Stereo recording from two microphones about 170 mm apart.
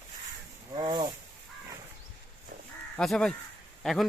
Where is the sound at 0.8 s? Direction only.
25° right (ahead or behind).